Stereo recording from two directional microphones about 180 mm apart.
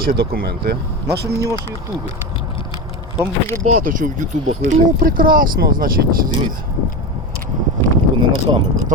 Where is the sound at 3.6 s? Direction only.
45° right (ahead or behind).